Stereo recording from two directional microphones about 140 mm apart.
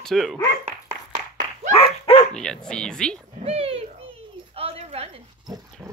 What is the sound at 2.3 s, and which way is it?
Speech, 5° left (ahead or behind).